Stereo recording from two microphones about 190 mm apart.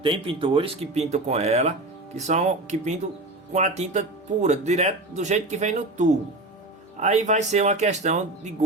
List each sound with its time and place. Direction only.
0.0 s speech: 25° right (ahead or behind)